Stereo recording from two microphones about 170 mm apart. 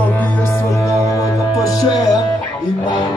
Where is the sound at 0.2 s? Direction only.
15° left (ahead or behind).